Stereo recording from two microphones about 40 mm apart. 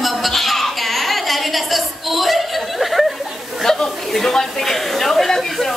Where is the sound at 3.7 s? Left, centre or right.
Centre.